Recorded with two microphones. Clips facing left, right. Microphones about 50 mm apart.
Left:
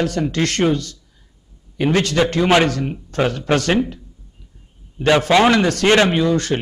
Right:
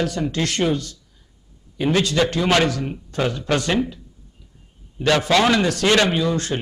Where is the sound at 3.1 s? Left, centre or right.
Left.